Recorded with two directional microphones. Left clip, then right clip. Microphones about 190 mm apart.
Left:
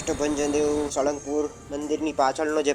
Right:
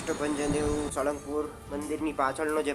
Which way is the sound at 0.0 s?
20° left (ahead or behind).